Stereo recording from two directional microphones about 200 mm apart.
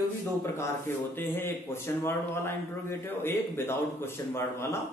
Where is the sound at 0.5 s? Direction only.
10° left (ahead or behind).